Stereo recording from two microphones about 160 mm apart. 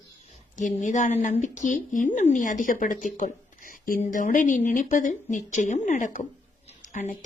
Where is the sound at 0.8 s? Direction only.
50° left (ahead or behind).